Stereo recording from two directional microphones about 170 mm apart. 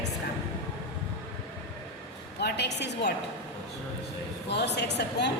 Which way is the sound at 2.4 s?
80° left.